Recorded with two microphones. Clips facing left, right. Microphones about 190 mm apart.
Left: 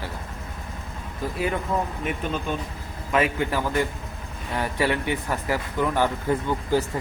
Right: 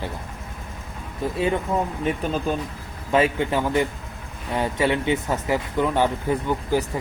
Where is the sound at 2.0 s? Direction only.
35° right (ahead or behind).